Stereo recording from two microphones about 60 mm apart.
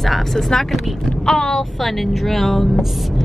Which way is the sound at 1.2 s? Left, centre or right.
Centre.